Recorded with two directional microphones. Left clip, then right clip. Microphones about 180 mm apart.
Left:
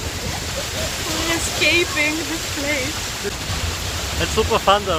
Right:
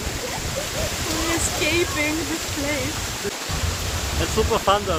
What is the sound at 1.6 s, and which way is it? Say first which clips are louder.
Waterfall: left 6 dB; 5° right (ahead or behind).